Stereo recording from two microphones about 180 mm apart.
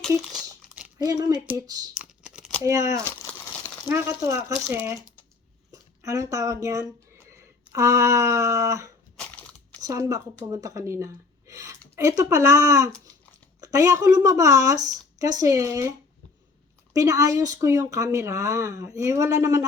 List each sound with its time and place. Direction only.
0.9 s speech: 20° right (ahead or behind)
2.0 s computer keyboard: 5° right (ahead or behind)
2.6 s speech: 15° right (ahead or behind)
3.0 s crumpling: 10° left (ahead or behind)
3.8 s speech: 15° right (ahead or behind)
16.9 s speech: 20° right (ahead or behind)